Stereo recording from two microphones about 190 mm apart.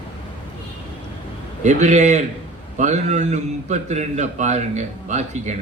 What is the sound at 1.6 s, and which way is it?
A man's voice, 40° right (ahead or behind).